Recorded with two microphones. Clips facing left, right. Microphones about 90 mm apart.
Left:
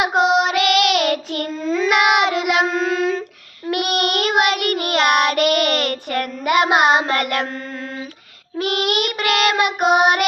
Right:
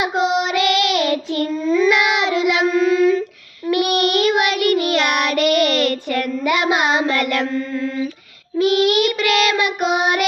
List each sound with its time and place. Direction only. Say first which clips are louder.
0.2 s child singing: left 2 dB; 60° left (ahead or behind)
2.7 s child singing: right 5 dB; 70° left (ahead or behind)
3.7 s child singing: right 3 dB; 55° left (ahead or behind)
7.5 s mantra: right 7 dB; 35° left (ahead or behind)
8.5 s child singing: right 5 dB; 55° left (ahead or behind)